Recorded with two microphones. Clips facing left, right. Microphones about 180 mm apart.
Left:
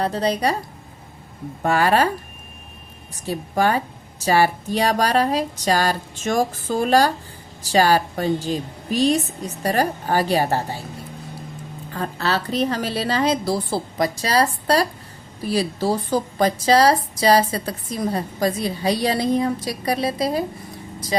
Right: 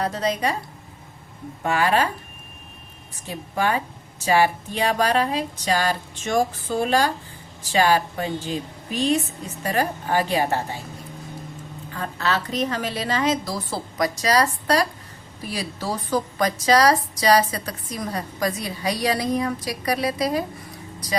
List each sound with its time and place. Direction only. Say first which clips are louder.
0.0 s a woman's voice: left 3 dB; 30° left (ahead or behind)
1.6 s a woman's voice: left 3 dB; 40° left (ahead or behind)
3.2 s a woman's voice: left 4 dB; 40° left (ahead or behind)
11.9 s a woman's voice: left 2 dB; 35° left (ahead or behind)